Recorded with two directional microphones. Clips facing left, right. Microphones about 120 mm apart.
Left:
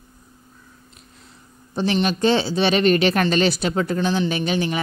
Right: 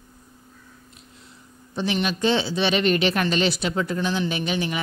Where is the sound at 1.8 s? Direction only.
40° left (ahead or behind).